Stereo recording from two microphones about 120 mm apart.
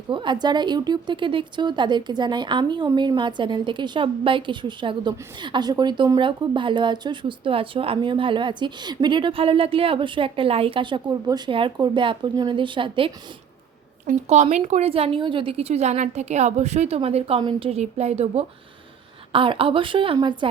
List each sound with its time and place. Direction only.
0.1 s a woman's voice: 40° right (ahead or behind)
14.1 s a woman's voice: 75° right (ahead or behind)
19.3 s a woman's voice: 50° right (ahead or behind)